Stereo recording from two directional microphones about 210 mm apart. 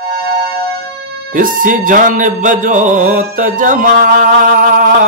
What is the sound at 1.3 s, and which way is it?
Music, 40° right (ahead or behind).